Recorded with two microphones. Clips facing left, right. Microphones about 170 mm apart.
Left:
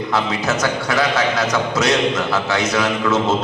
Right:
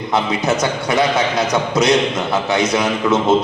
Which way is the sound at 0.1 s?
20° right (ahead or behind).